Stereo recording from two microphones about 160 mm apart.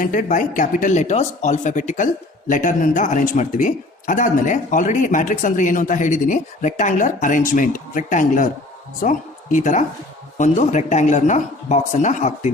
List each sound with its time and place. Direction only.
0.0 s speech: 55° left (ahead or behind)